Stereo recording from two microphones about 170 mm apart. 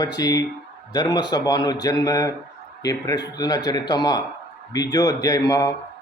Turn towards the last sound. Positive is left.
turn(degrees=20)  # may be behind; listen again after turning